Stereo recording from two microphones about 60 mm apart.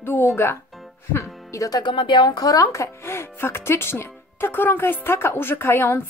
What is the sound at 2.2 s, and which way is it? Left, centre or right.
A woman's voice, left.